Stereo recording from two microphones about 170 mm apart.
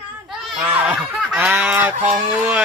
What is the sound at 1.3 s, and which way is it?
Goose, 10° right (ahead or behind).